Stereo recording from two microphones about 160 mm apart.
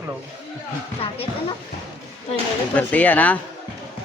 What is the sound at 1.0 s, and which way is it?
Speech, 35° left (ahead or behind).